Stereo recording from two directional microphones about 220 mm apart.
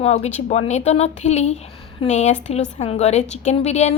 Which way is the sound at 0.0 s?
30° left (ahead or behind).